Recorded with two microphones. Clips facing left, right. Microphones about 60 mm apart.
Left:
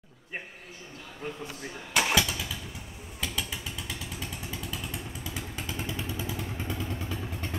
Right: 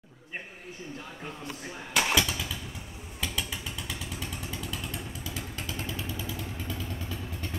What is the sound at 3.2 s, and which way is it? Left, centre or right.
Vehicle, centre.